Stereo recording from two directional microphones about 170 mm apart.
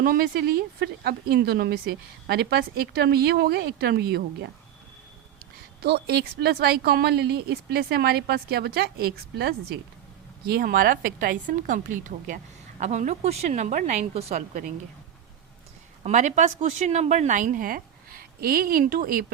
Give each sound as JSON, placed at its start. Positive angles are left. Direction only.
{"t": 0.0, "sound": "speech", "side_deg": -60}
{"t": 5.8, "sound": "a woman's voice", "side_deg": -70}
{"t": 14.3, "sound": "a woman's voice", "side_deg": -60}
{"t": 16.0, "sound": "speech", "side_deg": -45}